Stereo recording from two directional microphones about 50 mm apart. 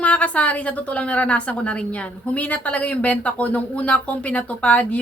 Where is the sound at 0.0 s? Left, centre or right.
Left.